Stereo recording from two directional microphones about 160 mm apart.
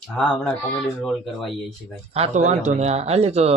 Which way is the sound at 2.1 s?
45° right (ahead or behind).